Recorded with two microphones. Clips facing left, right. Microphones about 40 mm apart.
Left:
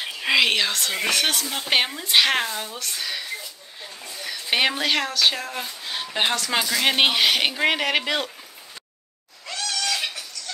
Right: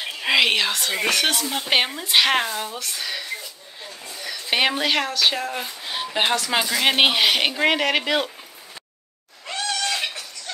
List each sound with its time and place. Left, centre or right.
0.0 s speech: centre
9.5 s cat: right
9.9 s a sound: centre